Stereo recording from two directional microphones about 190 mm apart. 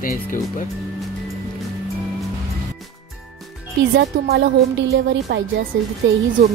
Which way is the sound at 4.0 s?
60° right (ahead or behind).